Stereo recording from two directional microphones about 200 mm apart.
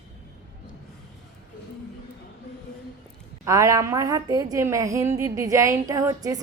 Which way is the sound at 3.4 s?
15° right (ahead or behind).